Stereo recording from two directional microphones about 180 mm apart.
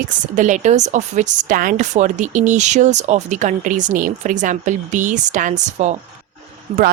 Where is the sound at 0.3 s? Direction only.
45° right (ahead or behind).